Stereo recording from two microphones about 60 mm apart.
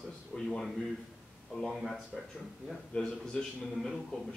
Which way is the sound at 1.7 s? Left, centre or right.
Centre.